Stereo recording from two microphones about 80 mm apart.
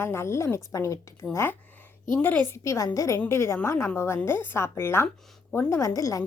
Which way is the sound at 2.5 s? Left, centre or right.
Left.